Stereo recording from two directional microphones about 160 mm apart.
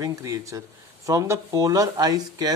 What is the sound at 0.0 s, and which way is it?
A man's voice, 20° right (ahead or behind).